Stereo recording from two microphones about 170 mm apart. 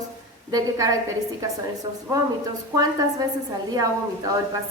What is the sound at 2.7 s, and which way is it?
A woman's voice, 20° right (ahead or behind).